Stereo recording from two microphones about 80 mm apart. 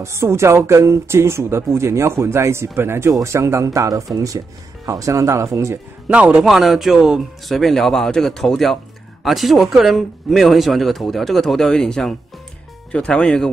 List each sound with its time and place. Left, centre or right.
0.0 s speech: right
6.0 s a man's voice: centre
6.4 s speech: centre